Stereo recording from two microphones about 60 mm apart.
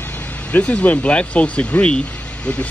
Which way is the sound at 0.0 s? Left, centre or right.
Left.